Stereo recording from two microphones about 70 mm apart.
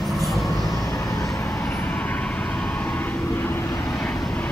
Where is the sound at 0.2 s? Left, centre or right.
Centre.